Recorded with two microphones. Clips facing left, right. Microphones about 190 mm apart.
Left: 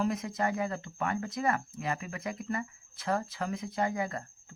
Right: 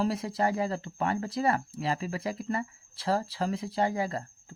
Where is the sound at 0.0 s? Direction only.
30° right (ahead or behind).